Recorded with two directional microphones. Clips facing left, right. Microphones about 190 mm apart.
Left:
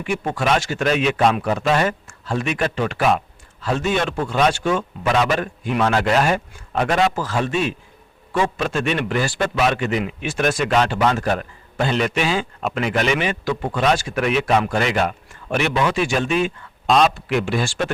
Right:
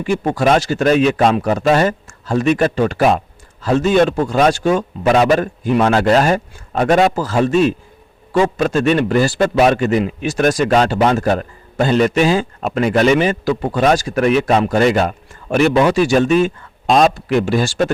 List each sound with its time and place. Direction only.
0.0 s a man's voice: 40° right (ahead or behind)